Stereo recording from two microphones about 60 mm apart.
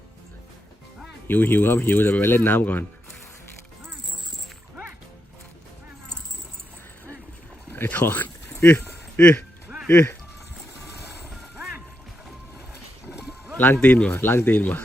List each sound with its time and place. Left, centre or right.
1.3 s speech: left
7.7 s a sound: left
9.9 s speech: left
13.1 s livestock: centre
13.8 s speech: left
14.1 s speech: left